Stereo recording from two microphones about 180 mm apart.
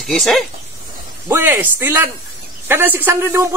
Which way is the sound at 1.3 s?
10° right (ahead or behind).